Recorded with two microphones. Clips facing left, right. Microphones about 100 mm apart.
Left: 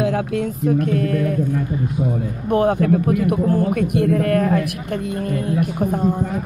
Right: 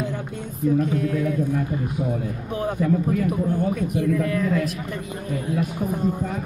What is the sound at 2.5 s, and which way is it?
Speech, 70° left (ahead or behind).